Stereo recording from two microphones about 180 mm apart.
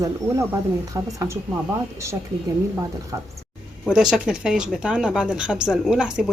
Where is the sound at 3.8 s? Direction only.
5° right (ahead or behind).